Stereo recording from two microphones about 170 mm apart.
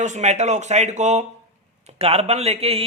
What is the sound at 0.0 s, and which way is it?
A man's voice, 45° right (ahead or behind).